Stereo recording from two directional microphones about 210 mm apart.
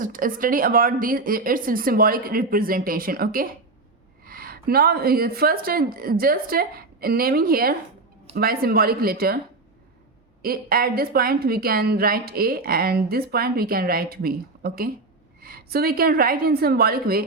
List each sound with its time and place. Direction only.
0.0 s a woman's voice: 40° right (ahead or behind)
10.4 s a woman's voice: 45° right (ahead or behind)